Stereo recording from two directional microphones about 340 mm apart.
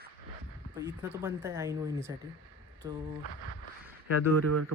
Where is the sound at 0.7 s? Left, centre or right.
Centre.